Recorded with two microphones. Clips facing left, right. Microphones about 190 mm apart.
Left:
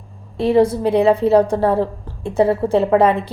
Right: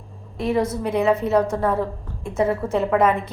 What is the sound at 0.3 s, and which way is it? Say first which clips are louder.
A woman's voice: left 7 dB; 30° left (ahead or behind).